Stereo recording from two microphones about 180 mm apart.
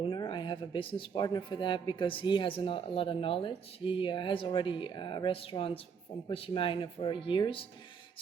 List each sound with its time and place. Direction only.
0.0 s a woman's voice: 25° left (ahead or behind)